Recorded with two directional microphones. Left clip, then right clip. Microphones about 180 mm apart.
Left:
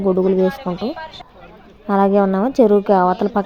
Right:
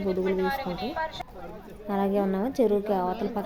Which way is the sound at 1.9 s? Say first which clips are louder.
Left 12 dB; 30° left (ahead or behind).